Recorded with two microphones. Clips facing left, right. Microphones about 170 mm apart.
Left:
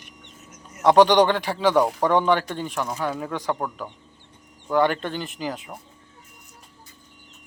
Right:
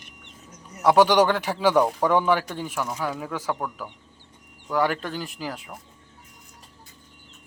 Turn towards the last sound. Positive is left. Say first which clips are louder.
# left 3 dB
turn(degrees=0)  # may be behind; listen again after turning